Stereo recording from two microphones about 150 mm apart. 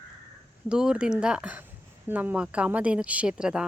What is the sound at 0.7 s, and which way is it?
A woman's voice, 5° right (ahead or behind).